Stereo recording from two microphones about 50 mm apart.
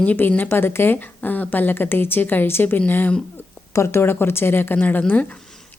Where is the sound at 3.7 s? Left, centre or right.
Left.